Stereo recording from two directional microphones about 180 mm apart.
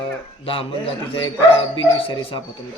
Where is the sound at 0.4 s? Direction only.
30° left (ahead or behind).